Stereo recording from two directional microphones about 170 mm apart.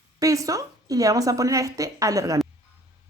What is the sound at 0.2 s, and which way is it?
Speech, 20° right (ahead or behind).